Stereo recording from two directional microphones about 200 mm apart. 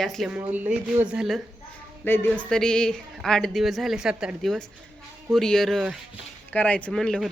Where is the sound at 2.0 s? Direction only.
10° left (ahead or behind).